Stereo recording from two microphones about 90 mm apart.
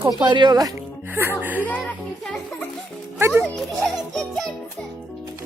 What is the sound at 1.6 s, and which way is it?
Speech, 15° left (ahead or behind).